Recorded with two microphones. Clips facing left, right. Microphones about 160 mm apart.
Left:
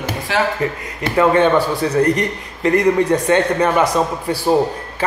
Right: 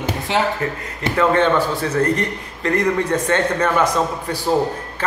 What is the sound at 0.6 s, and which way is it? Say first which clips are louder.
A man's voice: left 2 dB; 20° left (ahead or behind).